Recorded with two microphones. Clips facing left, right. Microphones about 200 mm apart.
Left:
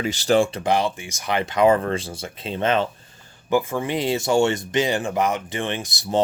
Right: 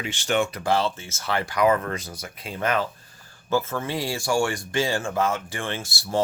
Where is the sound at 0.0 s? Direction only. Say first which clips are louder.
Left 6 dB; 40° left (ahead or behind).